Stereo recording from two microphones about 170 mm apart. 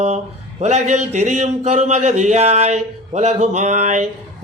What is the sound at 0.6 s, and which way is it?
A man's voice, 40° right (ahead or behind).